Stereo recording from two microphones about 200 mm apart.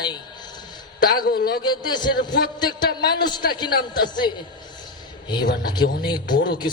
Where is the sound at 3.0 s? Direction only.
50° left (ahead or behind).